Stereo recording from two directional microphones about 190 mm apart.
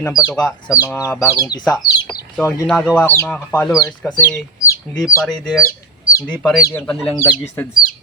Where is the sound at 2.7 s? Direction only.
5° left (ahead or behind).